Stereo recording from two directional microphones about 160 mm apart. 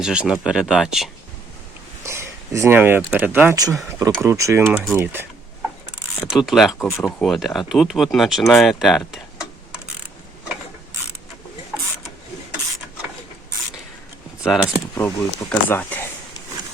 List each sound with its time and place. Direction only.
0.0 s speech: 5° right (ahead or behind)
2.0 s speech: 15° right (ahead or behind)
6.3 s speech: centre (ahead or behind)
6.7 s speech: 15° left (ahead or behind)
7.2 s speech: centre (ahead or behind)
14.4 s speech: 5° right (ahead or behind)
14.9 s speech: 15° left (ahead or behind)